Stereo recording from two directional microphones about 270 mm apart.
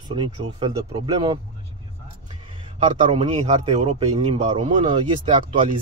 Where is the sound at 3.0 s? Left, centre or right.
Right.